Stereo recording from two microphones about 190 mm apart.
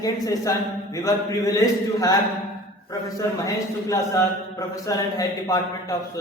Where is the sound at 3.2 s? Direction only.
15° left (ahead or behind).